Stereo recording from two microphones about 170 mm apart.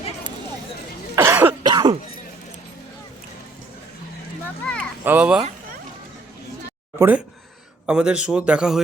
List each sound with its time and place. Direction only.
1.1 s cough: 15° right (ahead or behind)
1.6 s cough: 25° right (ahead or behind)
4.4 s a sound: 5° left (ahead or behind)
5.0 s a child's voice: 10° right (ahead or behind)
7.0 s a child's voice: 10° right (ahead or behind)